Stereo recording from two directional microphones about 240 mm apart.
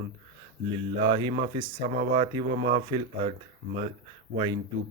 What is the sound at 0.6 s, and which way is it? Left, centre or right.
Speech, right.